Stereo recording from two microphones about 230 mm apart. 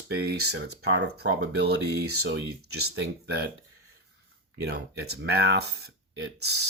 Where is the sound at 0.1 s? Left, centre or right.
Right.